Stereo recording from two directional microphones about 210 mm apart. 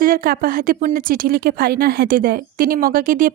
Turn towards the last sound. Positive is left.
turn(degrees=-40)  # may be behind; listen again after turning